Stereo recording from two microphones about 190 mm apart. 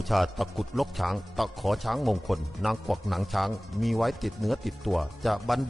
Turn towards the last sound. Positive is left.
turn(degrees=0)  # may be behind; listen again after turning